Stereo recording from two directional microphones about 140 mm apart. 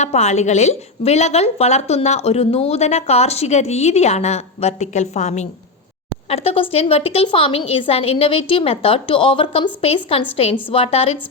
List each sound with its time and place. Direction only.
0.0 s a woman's voice: 55° left (ahead or behind)